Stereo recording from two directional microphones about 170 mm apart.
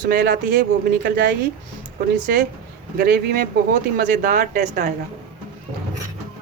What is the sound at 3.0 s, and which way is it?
Speech, 70° right (ahead or behind).